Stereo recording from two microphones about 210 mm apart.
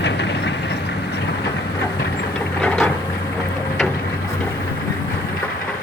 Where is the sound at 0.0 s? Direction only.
55° left (ahead or behind).